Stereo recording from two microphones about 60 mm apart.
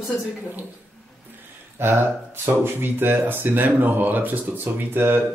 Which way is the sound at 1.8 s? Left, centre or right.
Right.